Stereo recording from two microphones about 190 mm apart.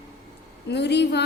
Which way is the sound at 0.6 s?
60° left (ahead or behind).